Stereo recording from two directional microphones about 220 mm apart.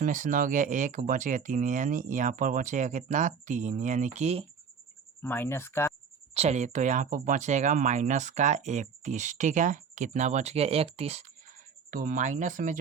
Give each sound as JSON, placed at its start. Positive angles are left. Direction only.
{"t": 0.0, "sound": "speech", "side_deg": -35}
{"t": 5.2, "sound": "speech", "side_deg": 10}
{"t": 6.3, "sound": "speech", "side_deg": -30}